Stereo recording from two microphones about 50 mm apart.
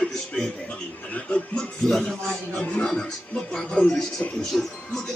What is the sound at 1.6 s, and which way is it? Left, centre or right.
Speech, centre.